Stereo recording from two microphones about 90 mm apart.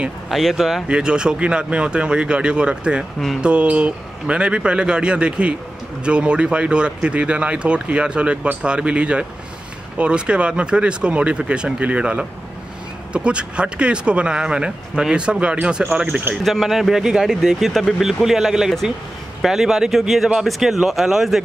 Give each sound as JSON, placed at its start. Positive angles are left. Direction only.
{"t": 0.3, "sound": "speech", "side_deg": 0}
{"t": 16.4, "sound": "speech", "side_deg": 0}